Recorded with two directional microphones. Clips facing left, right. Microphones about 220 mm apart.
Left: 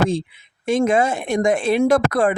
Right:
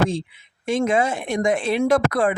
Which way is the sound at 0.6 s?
45° left (ahead or behind).